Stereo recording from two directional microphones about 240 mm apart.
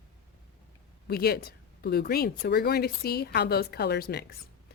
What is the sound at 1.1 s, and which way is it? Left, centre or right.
Speech, left.